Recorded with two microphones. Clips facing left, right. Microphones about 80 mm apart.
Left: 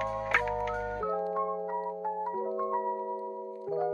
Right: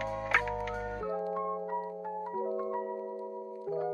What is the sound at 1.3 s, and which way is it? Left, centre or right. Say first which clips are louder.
Music: left 2 dB; left.